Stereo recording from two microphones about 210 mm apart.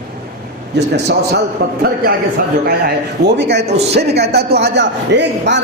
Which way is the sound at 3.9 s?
50° right (ahead or behind).